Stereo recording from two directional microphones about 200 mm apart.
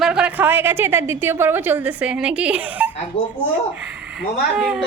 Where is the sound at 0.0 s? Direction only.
5° right (ahead or behind).